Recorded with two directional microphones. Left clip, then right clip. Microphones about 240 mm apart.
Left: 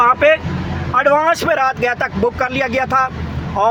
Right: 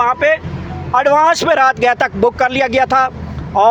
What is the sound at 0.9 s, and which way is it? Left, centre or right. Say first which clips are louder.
Speech: right 2 dB; right.